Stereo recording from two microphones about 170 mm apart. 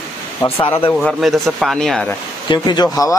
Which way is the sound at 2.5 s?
25° left (ahead or behind).